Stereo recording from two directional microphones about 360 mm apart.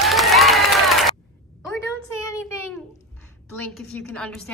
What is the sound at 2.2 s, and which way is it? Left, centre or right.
Child singing, centre.